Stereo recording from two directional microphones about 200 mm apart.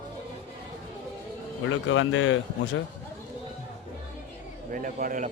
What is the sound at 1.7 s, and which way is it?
Speech, 75° left (ahead or behind).